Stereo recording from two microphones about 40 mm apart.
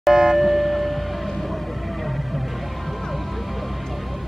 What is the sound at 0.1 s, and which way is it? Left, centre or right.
Music, centre.